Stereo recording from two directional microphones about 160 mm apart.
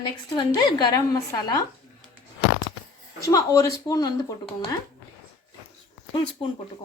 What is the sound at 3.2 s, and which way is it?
Speech, 20° left (ahead or behind).